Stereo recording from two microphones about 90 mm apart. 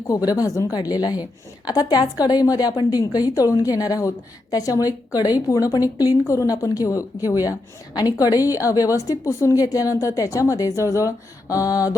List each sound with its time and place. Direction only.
0.1 s a woman's voice: 45° left (ahead or behind)